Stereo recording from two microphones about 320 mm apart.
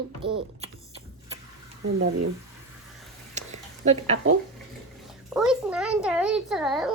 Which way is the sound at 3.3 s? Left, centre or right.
Right.